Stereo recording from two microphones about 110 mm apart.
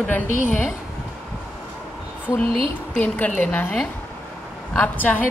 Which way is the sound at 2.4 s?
55° right (ahead or behind).